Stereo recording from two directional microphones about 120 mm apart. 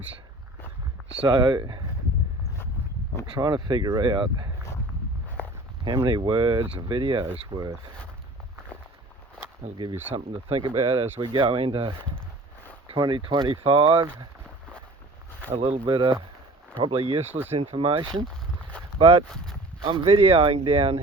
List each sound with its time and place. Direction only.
1.2 s speech: 40° right (ahead or behind)
3.3 s speech: 40° right (ahead or behind)
5.8 s speech: 40° right (ahead or behind)
10.2 s speech: 50° right (ahead or behind)
13.0 s speech: 45° right (ahead or behind)
15.5 s speech: 50° right (ahead or behind)